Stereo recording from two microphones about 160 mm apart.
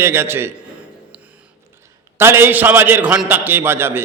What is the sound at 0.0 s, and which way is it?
Speech, 15° right (ahead or behind).